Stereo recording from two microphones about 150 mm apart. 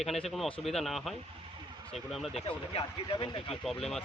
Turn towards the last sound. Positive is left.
turn(degrees=5)  # may be behind; listen again after turning